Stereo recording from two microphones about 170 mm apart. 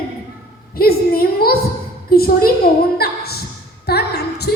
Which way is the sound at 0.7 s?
60° left (ahead or behind).